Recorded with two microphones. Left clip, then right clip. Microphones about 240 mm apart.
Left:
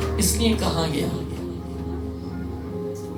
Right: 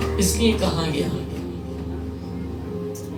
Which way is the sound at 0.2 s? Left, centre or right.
Left.